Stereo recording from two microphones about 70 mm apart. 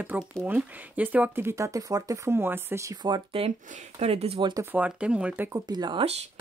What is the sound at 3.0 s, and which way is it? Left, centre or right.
Speech, right.